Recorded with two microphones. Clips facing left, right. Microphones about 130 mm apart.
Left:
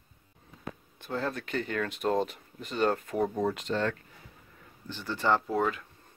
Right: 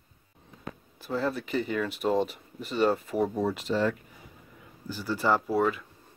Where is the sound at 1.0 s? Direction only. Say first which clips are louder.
Right 3 dB; 5° right (ahead or behind).